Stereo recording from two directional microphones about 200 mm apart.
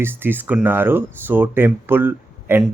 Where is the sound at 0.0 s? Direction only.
10° right (ahead or behind).